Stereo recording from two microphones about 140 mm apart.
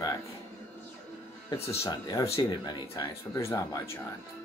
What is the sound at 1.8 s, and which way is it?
Speech, 25° left (ahead or behind).